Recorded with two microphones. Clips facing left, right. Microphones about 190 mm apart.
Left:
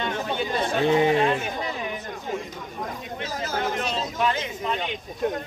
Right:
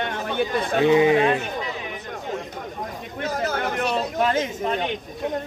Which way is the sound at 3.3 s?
60° right (ahead or behind).